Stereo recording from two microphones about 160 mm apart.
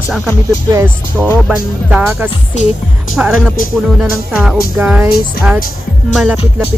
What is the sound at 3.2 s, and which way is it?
Speech, centre (ahead or behind).